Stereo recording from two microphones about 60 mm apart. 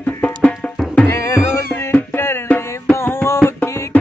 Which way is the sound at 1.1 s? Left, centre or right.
Left.